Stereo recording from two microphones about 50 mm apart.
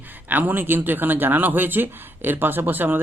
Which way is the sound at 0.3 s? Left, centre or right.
Right.